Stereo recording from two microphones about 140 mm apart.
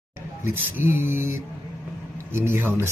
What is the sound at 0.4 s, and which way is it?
Speech, 15° right (ahead or behind).